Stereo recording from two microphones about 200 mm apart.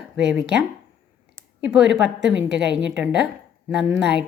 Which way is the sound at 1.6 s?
60° right (ahead or behind).